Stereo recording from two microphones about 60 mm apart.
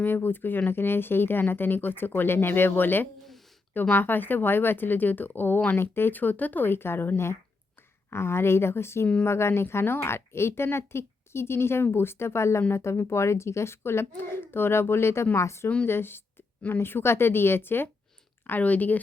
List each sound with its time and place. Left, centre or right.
0.0 s speech: left
15.9 s speech: left